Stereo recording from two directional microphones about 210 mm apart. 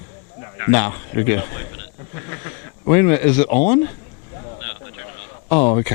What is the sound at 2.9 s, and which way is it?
Speech, 10° left (ahead or behind).